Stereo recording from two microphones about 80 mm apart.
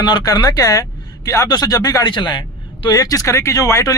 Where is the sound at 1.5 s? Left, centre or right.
Left.